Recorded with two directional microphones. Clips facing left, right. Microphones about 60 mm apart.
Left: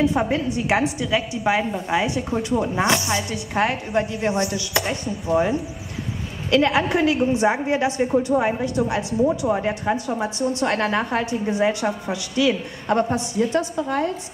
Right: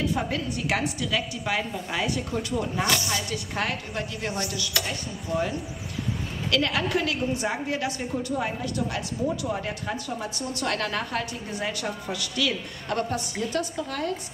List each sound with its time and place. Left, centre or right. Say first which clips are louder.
0.0 s a woman's voice: left 7 dB; left